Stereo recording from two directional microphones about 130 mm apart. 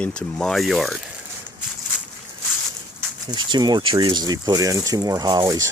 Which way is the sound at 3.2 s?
35° right (ahead or behind).